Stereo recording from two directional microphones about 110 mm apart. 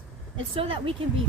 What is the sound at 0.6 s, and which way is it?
Speech, 55° right (ahead or behind).